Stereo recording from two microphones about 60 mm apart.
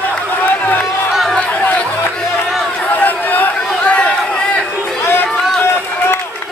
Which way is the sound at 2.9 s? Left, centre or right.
Left.